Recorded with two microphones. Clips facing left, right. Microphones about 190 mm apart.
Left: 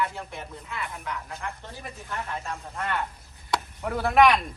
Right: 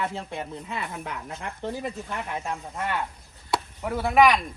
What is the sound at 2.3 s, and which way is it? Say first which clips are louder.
Speech: right 3 dB; 10° right (ahead or behind).